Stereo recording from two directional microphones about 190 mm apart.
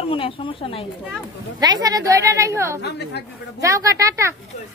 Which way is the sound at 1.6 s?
20° right (ahead or behind).